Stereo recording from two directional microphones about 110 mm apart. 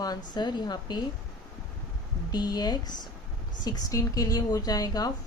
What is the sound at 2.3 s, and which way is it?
Speech, 40° left (ahead or behind).